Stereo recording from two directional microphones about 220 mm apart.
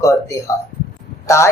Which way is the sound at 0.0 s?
15° left (ahead or behind).